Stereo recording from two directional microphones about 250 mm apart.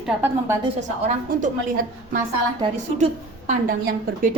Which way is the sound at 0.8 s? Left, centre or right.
Right.